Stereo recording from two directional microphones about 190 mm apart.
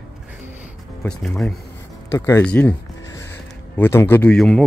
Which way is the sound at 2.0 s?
15° left (ahead or behind).